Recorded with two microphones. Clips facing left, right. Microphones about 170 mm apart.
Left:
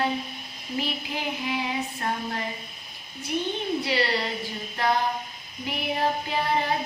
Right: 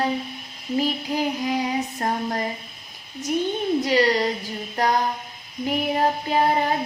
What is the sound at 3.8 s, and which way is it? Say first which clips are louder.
Child singing: right 7 dB; 45° right (ahead or behind).